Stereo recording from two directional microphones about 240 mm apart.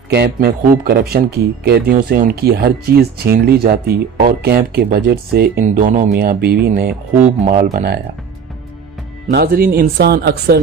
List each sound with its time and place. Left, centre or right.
0.1 s speech: right
9.3 s speech: right